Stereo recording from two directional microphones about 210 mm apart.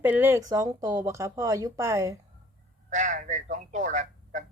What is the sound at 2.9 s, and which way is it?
Speech, 35° right (ahead or behind).